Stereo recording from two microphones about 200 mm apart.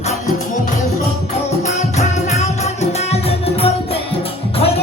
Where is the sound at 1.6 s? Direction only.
35° left (ahead or behind).